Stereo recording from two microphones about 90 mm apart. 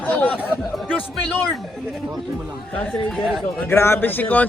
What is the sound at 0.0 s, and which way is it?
Chatter, 15° left (ahead or behind).